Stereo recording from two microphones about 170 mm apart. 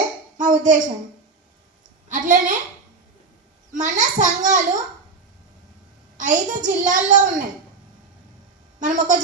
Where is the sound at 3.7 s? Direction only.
45° right (ahead or behind).